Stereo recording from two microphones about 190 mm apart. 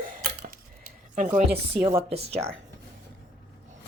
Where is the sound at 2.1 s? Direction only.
35° right (ahead or behind).